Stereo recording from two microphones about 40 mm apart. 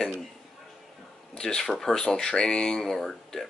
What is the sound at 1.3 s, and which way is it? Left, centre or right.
Speech, centre.